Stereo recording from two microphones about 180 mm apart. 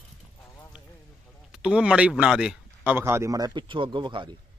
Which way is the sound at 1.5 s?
5° right (ahead or behind).